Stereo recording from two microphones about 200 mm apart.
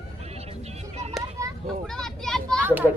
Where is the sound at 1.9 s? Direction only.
Centre (ahead or behind).